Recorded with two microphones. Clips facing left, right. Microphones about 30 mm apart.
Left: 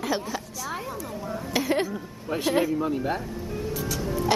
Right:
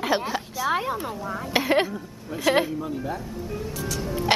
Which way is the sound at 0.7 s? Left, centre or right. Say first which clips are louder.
Right 8 dB; right.